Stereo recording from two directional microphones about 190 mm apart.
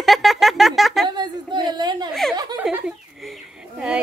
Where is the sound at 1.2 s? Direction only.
20° right (ahead or behind).